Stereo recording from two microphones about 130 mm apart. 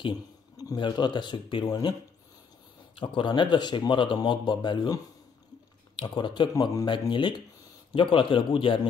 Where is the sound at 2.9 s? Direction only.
40° left (ahead or behind).